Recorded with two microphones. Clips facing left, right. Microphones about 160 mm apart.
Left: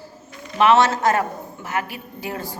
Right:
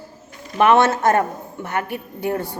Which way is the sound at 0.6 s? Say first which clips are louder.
Right 1 dB; 50° right (ahead or behind).